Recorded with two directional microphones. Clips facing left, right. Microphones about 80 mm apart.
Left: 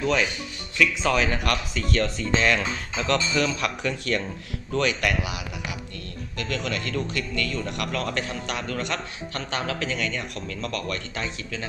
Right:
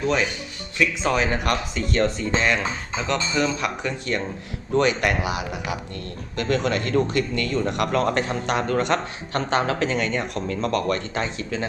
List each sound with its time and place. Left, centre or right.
0.0 s speech: right